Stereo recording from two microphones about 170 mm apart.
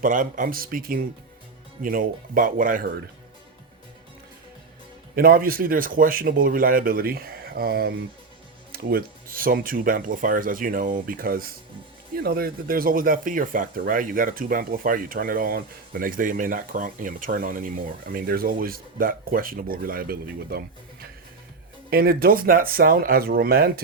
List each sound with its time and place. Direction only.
0.0 s speech: 50° right (ahead or behind)
5.1 s speech: 60° right (ahead or behind)
21.8 s speech: 60° right (ahead or behind)